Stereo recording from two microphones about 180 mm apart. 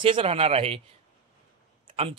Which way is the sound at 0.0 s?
30° right (ahead or behind).